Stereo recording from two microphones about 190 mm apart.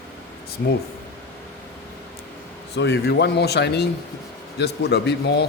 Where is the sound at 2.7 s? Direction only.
65° left (ahead or behind).